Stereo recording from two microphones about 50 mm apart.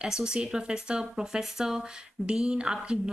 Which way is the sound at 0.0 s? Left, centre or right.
Centre.